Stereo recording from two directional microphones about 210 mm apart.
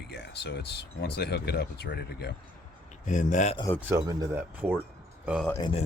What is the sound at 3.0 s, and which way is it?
Speech, 35° left (ahead or behind).